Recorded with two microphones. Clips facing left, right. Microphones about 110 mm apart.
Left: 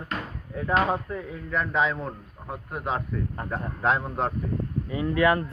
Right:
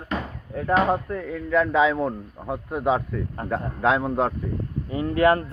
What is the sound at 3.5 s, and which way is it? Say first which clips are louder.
Speech: right 4 dB; 90° right.